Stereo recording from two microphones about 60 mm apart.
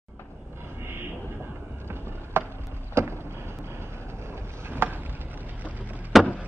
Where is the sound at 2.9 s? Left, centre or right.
Right.